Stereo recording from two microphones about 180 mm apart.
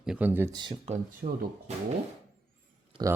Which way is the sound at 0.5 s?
25° right (ahead or behind).